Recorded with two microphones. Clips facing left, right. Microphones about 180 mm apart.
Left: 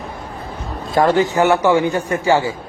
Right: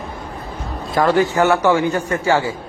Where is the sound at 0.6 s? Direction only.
25° left (ahead or behind).